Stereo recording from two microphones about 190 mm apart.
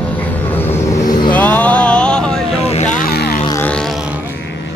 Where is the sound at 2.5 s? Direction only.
35° left (ahead or behind); by 3.4 s 55° left (ahead or behind).